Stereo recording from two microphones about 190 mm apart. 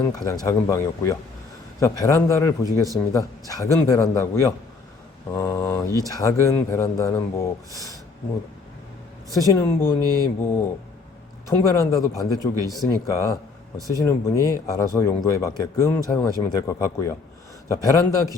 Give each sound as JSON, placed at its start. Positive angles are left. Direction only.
{"t": 0.0, "sound": "a man's voice", "side_deg": 15}
{"t": 9.4, "sound": "a man's voice", "side_deg": 15}
{"t": 11.4, "sound": "a man's voice", "side_deg": 15}